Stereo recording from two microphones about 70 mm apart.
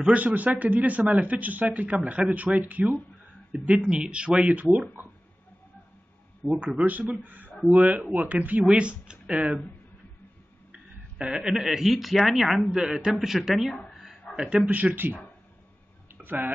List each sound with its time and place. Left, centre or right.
0.0 s speech: right
6.4 s a man's voice: centre
6.9 s speech: right
7.2 s a sound: right
7.7 s speech: centre
10.7 s speech: centre
13.8 s a sound: centre
14.3 s a man's voice: centre
14.7 s speech: right
16.2 s speech: right